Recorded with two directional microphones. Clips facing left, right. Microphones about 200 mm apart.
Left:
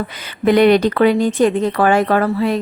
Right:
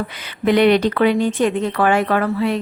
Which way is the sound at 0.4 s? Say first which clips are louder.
Left 2 dB; 45° left (ahead or behind).